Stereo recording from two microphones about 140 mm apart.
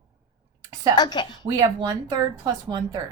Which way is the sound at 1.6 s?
30° right (ahead or behind).